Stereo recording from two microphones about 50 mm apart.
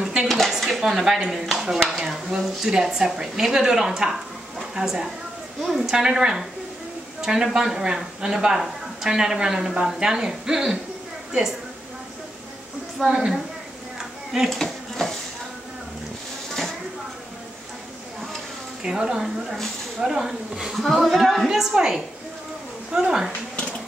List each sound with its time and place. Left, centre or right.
0.0 s dishes: centre
0.5 s dishes: centre
1.4 s speech: centre
13.0 s speech: centre
14.5 s dishes: centre
18.8 s a woman's voice: centre